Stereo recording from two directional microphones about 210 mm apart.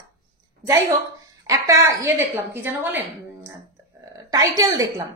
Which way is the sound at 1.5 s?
15° right (ahead or behind).